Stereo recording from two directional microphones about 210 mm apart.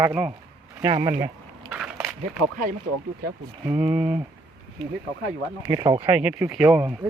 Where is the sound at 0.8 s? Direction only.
25° right (ahead or behind).